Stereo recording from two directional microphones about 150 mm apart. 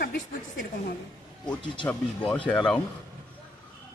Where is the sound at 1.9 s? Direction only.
10° left (ahead or behind).